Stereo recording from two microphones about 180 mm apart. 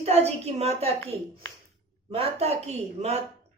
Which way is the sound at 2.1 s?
35° right (ahead or behind).